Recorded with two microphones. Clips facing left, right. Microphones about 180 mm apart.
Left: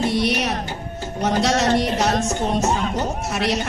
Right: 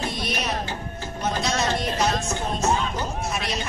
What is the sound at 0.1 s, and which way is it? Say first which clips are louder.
Music: left 7 dB; 75° left (ahead or behind).